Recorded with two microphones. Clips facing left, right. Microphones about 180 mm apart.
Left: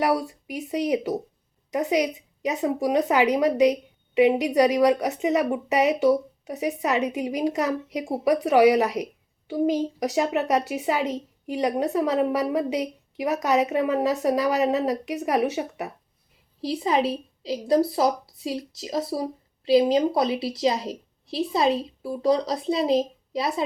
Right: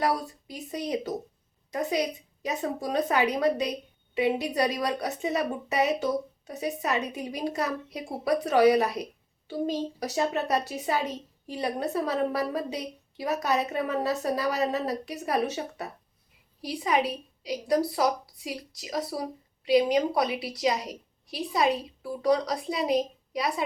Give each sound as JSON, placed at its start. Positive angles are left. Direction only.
{"t": 0.2, "sound": "a woman's voice", "side_deg": 15}
{"t": 16.6, "sound": "speech", "side_deg": 25}